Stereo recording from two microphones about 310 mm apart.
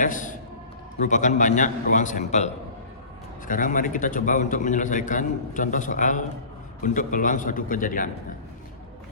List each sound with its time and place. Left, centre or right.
0.0 s a man's voice: left